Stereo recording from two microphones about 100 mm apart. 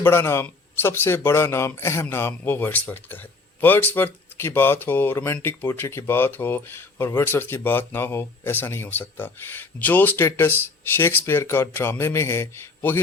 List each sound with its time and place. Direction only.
0.0 s speech: 25° left (ahead or behind)